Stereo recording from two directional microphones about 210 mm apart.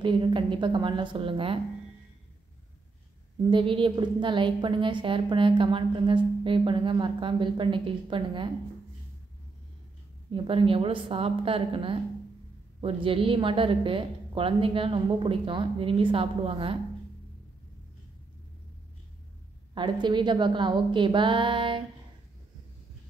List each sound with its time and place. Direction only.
0.0 s a woman's voice: 25° right (ahead or behind)
3.4 s a woman's voice: 25° right (ahead or behind)
10.3 s a woman's voice: 25° right (ahead or behind)
19.7 s a woman's voice: 20° right (ahead or behind)